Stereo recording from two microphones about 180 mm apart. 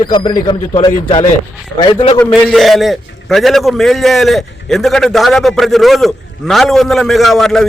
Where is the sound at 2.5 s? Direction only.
Centre (ahead or behind).